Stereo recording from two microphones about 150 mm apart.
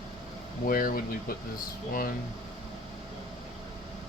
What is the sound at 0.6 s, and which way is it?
Speech, 70° left (ahead or behind).